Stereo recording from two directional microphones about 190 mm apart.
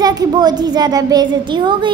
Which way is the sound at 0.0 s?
20° right (ahead or behind).